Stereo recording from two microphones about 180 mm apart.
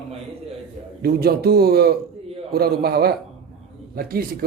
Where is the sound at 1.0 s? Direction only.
60° right (ahead or behind).